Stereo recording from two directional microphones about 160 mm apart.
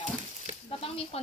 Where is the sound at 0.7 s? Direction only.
35° left (ahead or behind).